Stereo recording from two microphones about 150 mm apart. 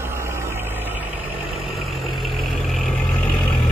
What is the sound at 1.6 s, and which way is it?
Vehicle, centre (ahead or behind).